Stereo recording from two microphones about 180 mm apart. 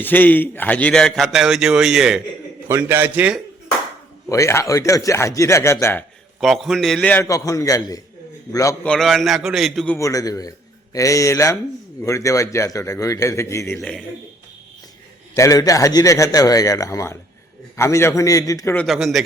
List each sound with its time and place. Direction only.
0.0 s a man's voice: 10° left (ahead or behind)
2.6 s a man's voice: 15° right (ahead or behind)
4.3 s a man's voice: 15° left (ahead or behind)
6.4 s a man's voice: centre (ahead or behind)
7.3 s a man's voice: 20° left (ahead or behind)
8.8 s a man's voice: 5° left (ahead or behind)
10.0 s a man's voice: 20° left (ahead or behind)
15.4 s a man's voice: 15° left (ahead or behind)
18.9 s a man's voice: centre (ahead or behind)